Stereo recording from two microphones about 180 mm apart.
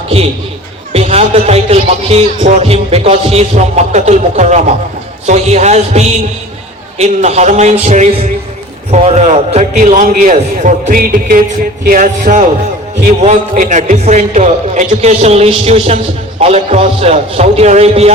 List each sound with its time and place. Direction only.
0.9 s music: 35° right (ahead or behind)
9.7 s a man's voice: 45° right (ahead or behind)
13.2 s music: 45° right (ahead or behind)